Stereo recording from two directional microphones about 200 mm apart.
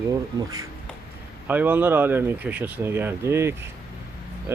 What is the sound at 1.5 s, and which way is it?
Speech, 10° right (ahead or behind).